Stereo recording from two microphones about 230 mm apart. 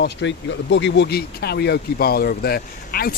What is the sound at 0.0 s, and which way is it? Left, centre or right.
Speech, left.